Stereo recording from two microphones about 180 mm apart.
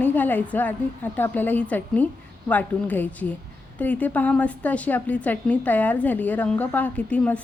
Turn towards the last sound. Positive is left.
turn(degrees=5)  # may be behind; listen again after turning